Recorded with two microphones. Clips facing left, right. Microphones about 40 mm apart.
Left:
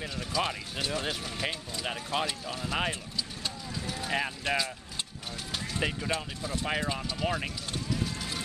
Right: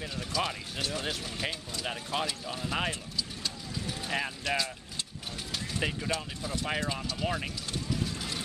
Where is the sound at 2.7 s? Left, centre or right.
Centre.